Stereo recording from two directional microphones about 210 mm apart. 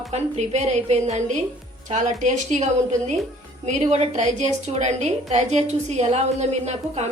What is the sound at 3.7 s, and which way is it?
A woman's voice, 30° right (ahead or behind).